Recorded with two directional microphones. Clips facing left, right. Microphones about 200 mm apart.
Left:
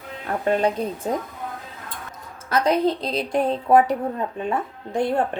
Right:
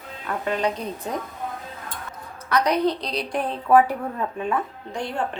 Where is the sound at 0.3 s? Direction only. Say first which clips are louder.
Left 4 dB; 45° left (ahead or behind).